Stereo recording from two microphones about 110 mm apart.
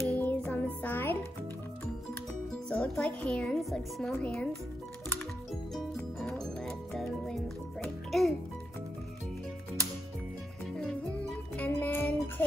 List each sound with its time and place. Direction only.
0.1 s music: 15° left (ahead or behind)
2.7 s speech: 10° left (ahead or behind)
6.2 s music: 5° left (ahead or behind)
10.8 s music: 5° left (ahead or behind)